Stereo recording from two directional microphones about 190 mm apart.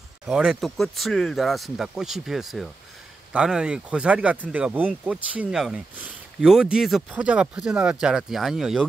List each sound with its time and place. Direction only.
0.3 s speech: 5° right (ahead or behind)